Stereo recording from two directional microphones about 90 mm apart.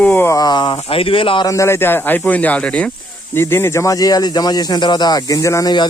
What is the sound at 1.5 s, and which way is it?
Speech, 35° left (ahead or behind).